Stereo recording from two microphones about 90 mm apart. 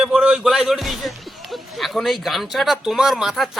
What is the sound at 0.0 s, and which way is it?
Speech, 10° right (ahead or behind).